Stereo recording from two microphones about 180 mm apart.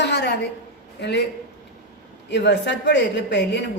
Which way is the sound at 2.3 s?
75° left (ahead or behind).